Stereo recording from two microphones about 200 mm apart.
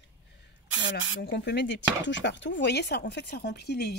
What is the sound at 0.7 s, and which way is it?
Speech, 65° left (ahead or behind).